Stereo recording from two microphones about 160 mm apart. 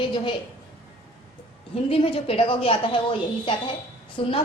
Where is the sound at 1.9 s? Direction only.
35° left (ahead or behind).